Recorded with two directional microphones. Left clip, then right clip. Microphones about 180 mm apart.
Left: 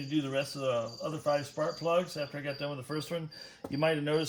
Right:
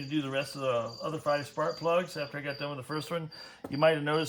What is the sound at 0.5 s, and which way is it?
Speech, 20° right (ahead or behind).